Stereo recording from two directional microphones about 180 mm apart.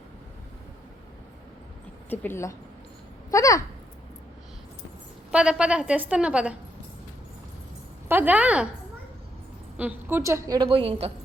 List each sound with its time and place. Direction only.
2.0 s speech: 15° left (ahead or behind)
5.3 s a woman's voice: 5° right (ahead or behind)
8.0 s a woman's voice: 10° right (ahead or behind)
9.7 s a woman's voice: 10° right (ahead or behind)
10.7 s a woman's voice: 30° right (ahead or behind)